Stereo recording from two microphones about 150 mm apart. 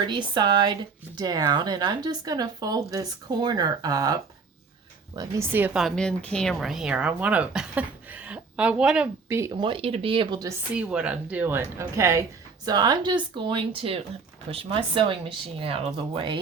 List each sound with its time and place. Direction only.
0.0 s a woman's voice: 30° right (ahead or behind); by 5.8 s 10° right (ahead or behind)
5.8 s speech: 5° left (ahead or behind)
9.3 s speech: 20° right (ahead or behind)
9.6 s speech: 35° right (ahead or behind)
10.7 s a woman's voice: 10° right (ahead or behind); by 16.4 s 35° right (ahead or behind)